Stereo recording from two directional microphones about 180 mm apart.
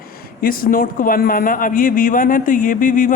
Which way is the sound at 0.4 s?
50° left (ahead or behind).